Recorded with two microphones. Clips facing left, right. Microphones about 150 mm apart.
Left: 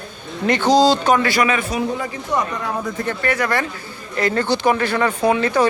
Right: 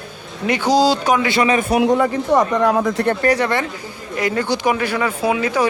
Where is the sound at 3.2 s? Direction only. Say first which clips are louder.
Right 3 dB; 35° right (ahead or behind).